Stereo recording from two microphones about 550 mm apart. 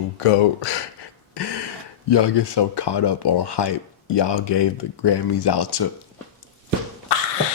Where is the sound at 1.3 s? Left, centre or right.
Left.